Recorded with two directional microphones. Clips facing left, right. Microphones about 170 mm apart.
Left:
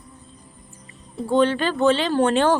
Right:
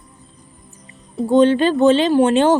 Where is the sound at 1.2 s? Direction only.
20° right (ahead or behind).